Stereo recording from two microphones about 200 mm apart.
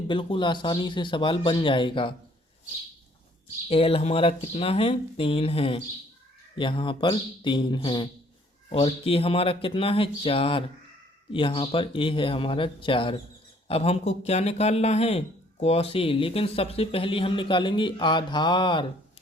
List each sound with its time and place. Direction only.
0.1 s speech: 25° left (ahead or behind)
3.7 s speech: 30° left (ahead or behind)